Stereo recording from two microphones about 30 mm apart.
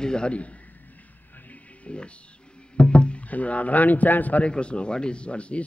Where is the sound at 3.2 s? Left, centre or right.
Left.